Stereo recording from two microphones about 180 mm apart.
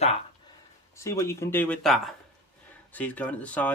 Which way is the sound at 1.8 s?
Centre (ahead or behind).